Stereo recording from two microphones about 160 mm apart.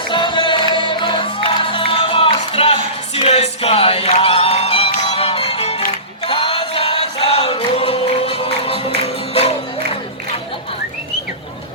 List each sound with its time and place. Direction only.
0.1 s music: 30° left (ahead or behind)